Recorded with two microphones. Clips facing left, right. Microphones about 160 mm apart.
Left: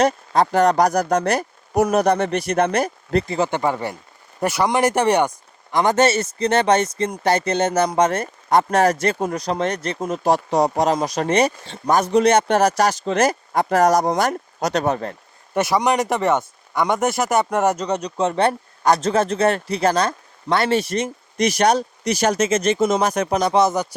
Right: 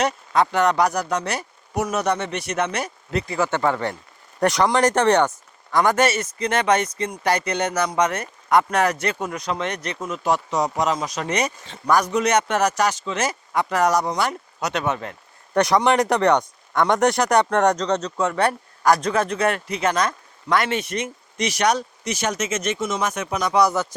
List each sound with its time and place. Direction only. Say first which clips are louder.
0.0 s speech: left 3 dB; 40° left (ahead or behind)
3.2 s speech: left 1 dB; 20° left (ahead or behind); by 11.3 s 45° left (ahead or behind)
11.3 s speech: left 7 dB; 30° left (ahead or behind)
15.5 s speech: right 1 dB; 5° left (ahead or behind)